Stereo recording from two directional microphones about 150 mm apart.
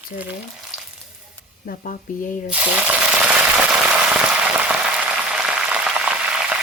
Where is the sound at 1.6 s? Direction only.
65° left (ahead or behind).